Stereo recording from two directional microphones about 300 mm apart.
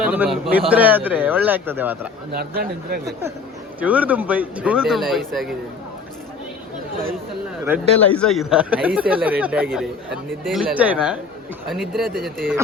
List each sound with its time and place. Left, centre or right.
0.0 s a man's voice: centre
2.3 s speech: right
3.1 s speech: centre
7.9 s speech: centre